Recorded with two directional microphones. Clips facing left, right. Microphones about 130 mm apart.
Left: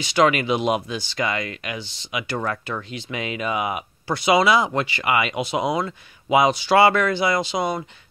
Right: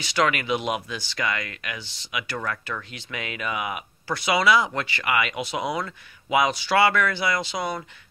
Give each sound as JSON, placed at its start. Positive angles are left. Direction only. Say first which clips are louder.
{"t": 0.0, "sound": "speech", "louder": "left 5 dB", "side_deg": 20}